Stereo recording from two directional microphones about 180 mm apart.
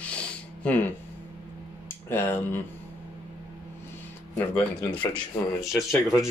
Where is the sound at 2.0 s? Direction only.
10° left (ahead or behind).